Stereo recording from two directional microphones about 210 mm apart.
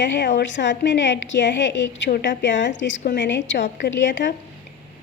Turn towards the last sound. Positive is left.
turn(degrees=60)  # may be behind; listen again after turning